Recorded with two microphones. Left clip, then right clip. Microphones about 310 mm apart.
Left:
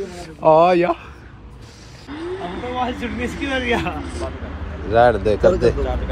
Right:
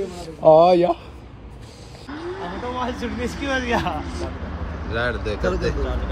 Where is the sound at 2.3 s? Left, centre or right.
Centre.